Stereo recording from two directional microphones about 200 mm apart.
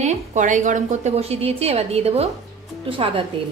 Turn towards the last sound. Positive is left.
turn(degrees=-25)  # may be behind; listen again after turning